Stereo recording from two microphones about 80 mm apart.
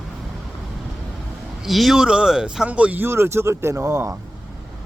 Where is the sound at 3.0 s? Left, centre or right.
Right.